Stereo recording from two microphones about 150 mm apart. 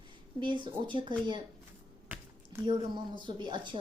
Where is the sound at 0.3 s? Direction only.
30° right (ahead or behind).